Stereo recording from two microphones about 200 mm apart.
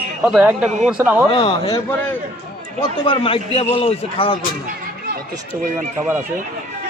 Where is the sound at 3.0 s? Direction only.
25° left (ahead or behind).